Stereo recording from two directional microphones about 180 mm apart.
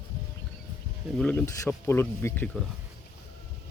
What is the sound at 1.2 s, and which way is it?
Speech, 5° left (ahead or behind).